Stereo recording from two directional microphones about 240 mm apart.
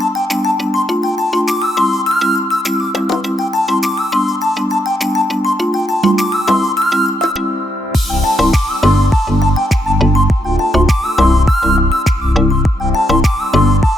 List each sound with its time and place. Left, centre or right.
0.0 s music: centre
3.6 s music: centre
8.4 s music: centre
10.7 s music: centre
13.0 s music: centre